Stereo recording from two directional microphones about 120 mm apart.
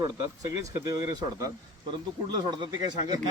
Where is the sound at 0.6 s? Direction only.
25° right (ahead or behind).